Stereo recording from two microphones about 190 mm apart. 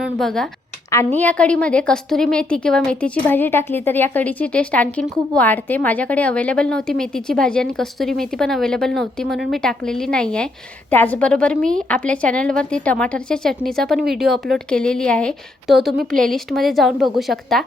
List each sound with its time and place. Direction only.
0.0 s a woman's voice: centre (ahead or behind)